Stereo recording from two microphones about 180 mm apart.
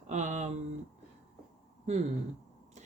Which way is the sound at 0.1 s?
40° right (ahead or behind).